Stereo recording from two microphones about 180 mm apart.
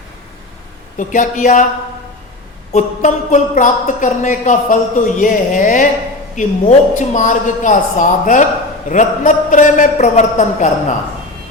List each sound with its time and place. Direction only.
0.9 s a woman's voice: 45° left (ahead or behind)
2.7 s a woman's voice: 40° left (ahead or behind)